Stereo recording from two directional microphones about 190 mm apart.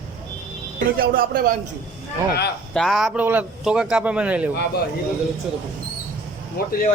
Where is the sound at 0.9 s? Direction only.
50° right (ahead or behind).